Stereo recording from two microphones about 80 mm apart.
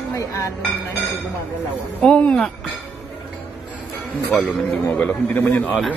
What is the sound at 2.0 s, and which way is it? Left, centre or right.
Speech, centre.